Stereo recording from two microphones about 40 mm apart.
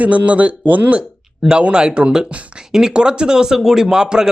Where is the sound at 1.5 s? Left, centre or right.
Right.